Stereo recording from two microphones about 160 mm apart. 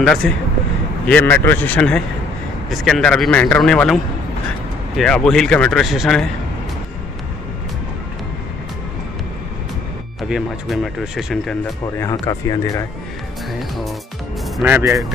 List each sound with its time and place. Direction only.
0.0 s a man's voice: 5° left (ahead or behind)
10.3 s a man's voice: centre (ahead or behind)
12.0 s speech: 20° left (ahead or behind)
13.5 s speech: centre (ahead or behind)
14.6 s speech: 10° right (ahead or behind)